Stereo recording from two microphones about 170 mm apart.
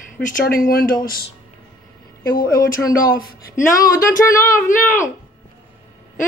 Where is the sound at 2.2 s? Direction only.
55° left (ahead or behind).